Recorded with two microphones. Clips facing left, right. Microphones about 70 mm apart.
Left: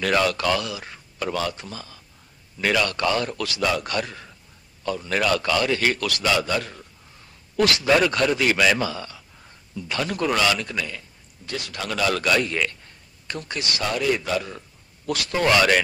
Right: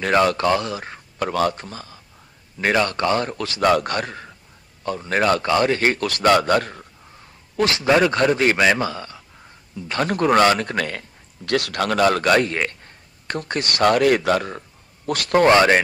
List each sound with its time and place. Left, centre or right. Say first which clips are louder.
0.0 s a man's voice: right 4 dB; right
7.5 s a man's voice: right 2 dB; right